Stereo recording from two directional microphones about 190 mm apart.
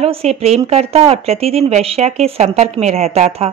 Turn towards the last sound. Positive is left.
turn(degrees=-35)  # may be behind; listen again after turning